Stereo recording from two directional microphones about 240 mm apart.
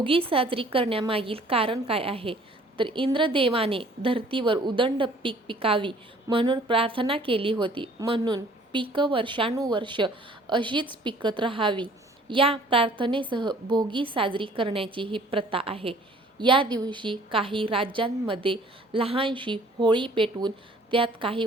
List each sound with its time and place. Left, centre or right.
0.0 s a woman's voice: right